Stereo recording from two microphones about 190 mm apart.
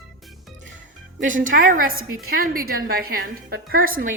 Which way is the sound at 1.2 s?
45° right (ahead or behind).